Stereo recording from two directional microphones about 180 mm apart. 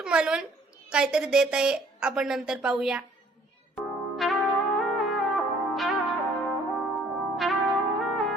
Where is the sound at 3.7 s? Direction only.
Centre (ahead or behind).